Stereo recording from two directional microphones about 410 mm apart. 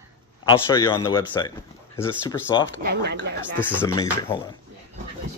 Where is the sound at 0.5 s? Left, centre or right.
Centre.